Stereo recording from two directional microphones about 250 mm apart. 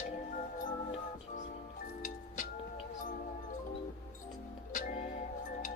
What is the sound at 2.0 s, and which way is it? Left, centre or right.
Music, left.